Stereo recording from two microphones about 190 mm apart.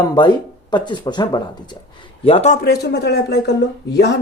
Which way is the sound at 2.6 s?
60° left (ahead or behind).